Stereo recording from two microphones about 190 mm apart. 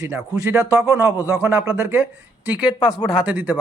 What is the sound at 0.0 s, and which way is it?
Speech, 15° right (ahead or behind).